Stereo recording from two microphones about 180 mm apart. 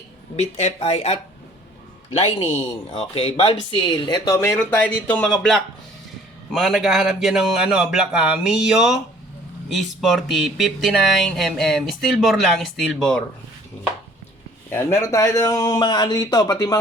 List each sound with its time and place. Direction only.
0.3 s speech: 35° left (ahead or behind)
3.0 s speech: 30° left (ahead or behind); by 13.2 s 5° left (ahead or behind)
14.7 s a man's voice: 15° left (ahead or behind)